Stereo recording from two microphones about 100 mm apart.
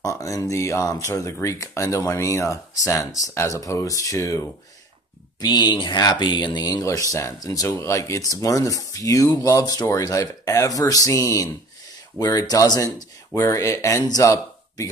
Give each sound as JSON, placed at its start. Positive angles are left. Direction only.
{"t": 0.0, "sound": "speech", "side_deg": 35}
{"t": 5.4, "sound": "speech", "side_deg": 45}